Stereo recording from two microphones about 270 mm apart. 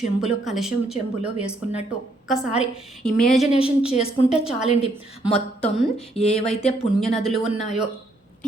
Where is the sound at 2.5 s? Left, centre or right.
Centre.